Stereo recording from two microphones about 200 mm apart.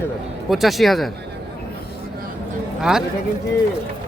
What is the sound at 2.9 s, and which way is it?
Speech, centre (ahead or behind).